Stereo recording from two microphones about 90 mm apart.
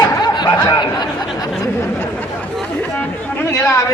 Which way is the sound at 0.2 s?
50° left (ahead or behind).